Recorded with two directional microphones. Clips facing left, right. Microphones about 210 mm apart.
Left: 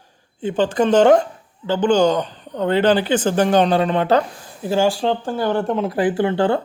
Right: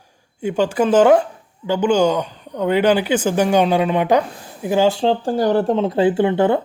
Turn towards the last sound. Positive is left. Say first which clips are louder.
# right 2 dB
turn(degrees=-20)  # may be behind; listen again after turning